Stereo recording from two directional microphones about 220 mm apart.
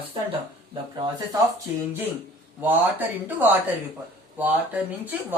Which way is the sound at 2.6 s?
10° right (ahead or behind).